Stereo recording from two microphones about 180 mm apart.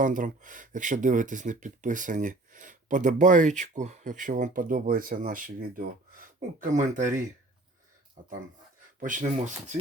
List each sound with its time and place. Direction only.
0.0 s speech: 45° right (ahead or behind)
9.0 s speech: 45° right (ahead or behind)